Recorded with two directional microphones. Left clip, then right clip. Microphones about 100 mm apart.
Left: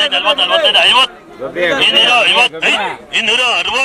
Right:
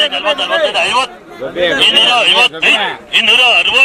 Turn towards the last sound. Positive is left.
turn(degrees=30)  # may be behind; listen again after turning